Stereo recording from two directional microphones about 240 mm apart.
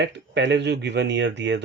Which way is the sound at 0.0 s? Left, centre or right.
Right.